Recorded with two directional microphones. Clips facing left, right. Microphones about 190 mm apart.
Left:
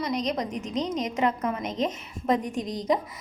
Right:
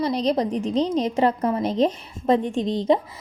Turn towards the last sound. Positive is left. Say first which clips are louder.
# right 6 dB
turn(degrees=-30)  # may be behind; listen again after turning